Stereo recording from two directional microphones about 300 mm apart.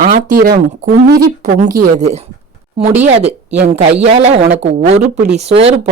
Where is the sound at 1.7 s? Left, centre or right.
Right.